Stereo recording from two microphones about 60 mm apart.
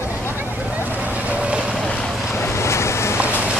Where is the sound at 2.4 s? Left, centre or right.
Left.